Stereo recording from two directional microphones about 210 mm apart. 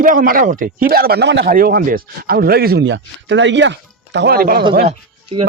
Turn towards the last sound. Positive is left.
turn(degrees=-30)  # may be behind; listen again after turning